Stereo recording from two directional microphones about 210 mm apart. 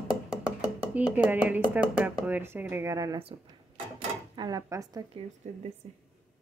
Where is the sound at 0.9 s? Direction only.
5° right (ahead or behind).